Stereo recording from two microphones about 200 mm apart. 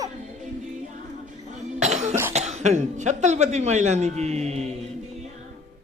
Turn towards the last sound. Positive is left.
turn(degrees=-35)  # may be behind; listen again after turning